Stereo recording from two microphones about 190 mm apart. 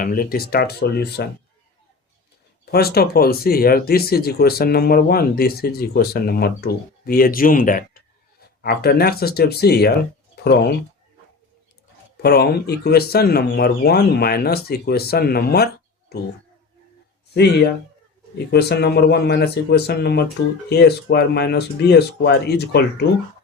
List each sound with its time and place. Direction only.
0.0 s speech: 50° left (ahead or behind)
2.7 s speech: 55° left (ahead or behind)
12.2 s speech: 55° left (ahead or behind)
18.3 s speech: 60° left (ahead or behind)